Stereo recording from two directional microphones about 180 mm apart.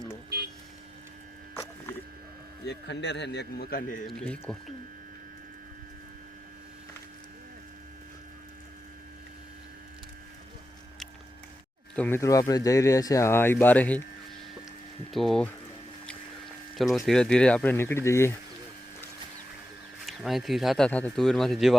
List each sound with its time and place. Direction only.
2.6 s speech: 75° left (ahead or behind); by 4.0 s 50° left (ahead or behind)
4.0 s speech: 5° left (ahead or behind)
11.9 s speech: 10° left (ahead or behind)
15.1 s speech: centre (ahead or behind)
16.7 s speech: centre (ahead or behind)
20.0 s speech: centre (ahead or behind)